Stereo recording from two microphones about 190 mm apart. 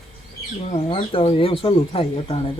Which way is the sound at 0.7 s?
30° left (ahead or behind).